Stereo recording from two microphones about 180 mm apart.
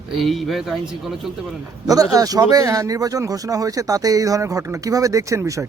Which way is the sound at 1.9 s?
20° right (ahead or behind).